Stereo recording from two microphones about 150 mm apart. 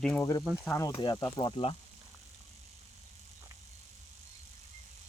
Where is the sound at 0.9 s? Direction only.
30° left (ahead or behind).